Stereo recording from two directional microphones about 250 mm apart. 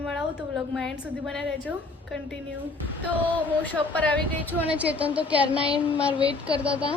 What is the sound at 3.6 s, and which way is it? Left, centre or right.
Speech, centre.